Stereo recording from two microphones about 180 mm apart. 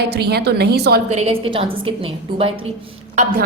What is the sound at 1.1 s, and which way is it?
A woman's voice, 35° right (ahead or behind).